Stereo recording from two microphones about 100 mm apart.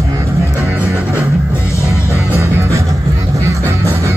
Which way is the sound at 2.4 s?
25° right (ahead or behind).